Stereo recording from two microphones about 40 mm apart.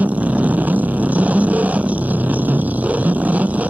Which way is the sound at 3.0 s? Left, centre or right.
Right.